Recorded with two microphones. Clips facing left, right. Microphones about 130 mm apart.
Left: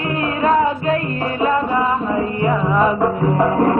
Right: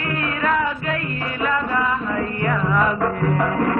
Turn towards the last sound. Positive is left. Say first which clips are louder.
# left 5 dB
turn(degrees=25)  # may be behind; listen again after turning